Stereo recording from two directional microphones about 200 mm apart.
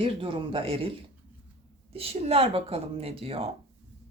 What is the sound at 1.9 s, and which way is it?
Speech, 30° right (ahead or behind).